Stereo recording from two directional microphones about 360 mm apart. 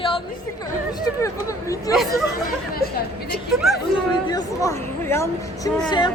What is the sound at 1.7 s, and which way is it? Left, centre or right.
Speech, centre.